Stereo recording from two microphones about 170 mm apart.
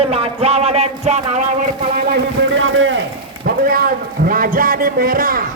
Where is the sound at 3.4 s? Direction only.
60° right (ahead or behind).